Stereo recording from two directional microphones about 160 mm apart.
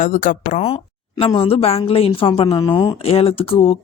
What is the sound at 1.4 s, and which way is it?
Speech, 35° left (ahead or behind).